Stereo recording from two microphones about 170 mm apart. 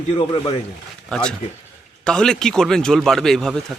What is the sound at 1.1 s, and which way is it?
A man's voice, 5° left (ahead or behind).